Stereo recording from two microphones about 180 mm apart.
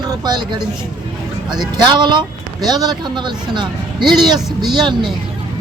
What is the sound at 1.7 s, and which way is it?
Speech, 25° right (ahead or behind).